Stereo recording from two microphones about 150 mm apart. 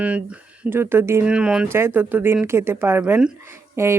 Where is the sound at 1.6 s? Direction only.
15° right (ahead or behind).